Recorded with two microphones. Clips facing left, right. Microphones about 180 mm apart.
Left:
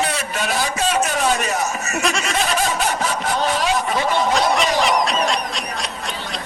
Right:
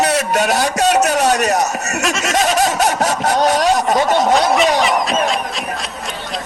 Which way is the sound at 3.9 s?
45° right (ahead or behind).